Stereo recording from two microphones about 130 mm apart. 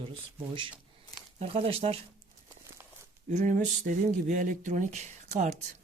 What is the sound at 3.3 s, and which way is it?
Speech, 70° right (ahead or behind).